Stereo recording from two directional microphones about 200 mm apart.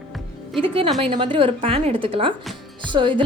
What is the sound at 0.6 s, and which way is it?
A woman's voice, 25° right (ahead or behind).